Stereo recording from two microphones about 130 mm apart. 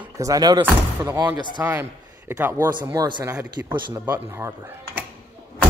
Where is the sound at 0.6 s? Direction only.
15° right (ahead or behind).